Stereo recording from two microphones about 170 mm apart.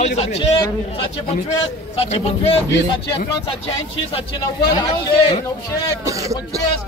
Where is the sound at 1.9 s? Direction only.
35° left (ahead or behind).